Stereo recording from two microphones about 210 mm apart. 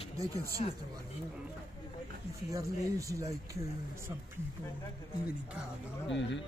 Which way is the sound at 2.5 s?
15° right (ahead or behind).